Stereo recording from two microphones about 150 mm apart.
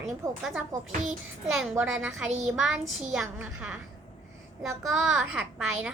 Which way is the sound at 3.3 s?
10° right (ahead or behind).